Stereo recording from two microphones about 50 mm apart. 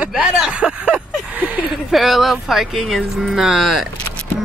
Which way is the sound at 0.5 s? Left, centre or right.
Right.